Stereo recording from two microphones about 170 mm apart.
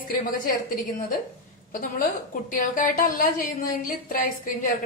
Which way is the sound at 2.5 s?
50° left (ahead or behind).